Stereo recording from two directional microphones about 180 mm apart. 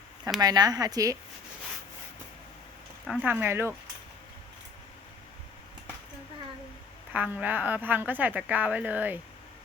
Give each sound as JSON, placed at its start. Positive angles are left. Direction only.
{"t": 0.3, "sound": "speech", "side_deg": -20}
{"t": 3.1, "sound": "speech", "side_deg": -10}
{"t": 7.1, "sound": "speech", "side_deg": -10}